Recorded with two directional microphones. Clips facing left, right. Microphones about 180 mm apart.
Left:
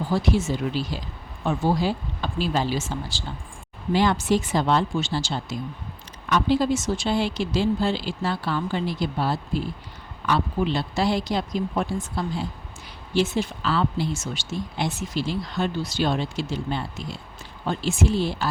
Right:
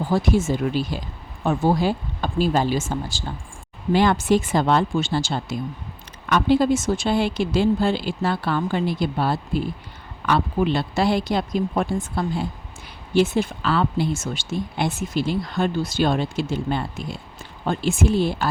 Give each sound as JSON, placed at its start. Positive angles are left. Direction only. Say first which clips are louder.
{"t": 0.1, "sound": "speech", "louder": "right 3 dB", "side_deg": -50}